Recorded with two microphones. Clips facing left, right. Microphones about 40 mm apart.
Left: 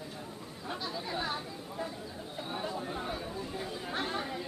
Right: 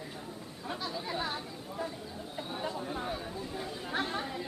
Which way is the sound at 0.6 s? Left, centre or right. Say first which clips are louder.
Right 1 dB; centre.